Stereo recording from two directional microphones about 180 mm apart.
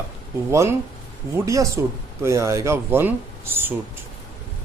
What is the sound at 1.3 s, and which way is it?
A man's voice, 15° right (ahead or behind).